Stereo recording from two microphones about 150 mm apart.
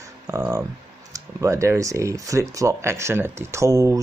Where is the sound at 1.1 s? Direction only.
20° right (ahead or behind).